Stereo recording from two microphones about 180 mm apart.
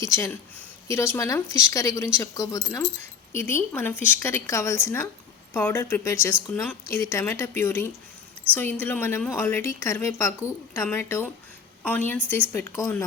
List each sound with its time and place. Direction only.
0.0 s a woman's voice: 15° left (ahead or behind)